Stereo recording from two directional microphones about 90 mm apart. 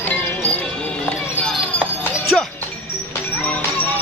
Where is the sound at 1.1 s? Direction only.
10° left (ahead or behind).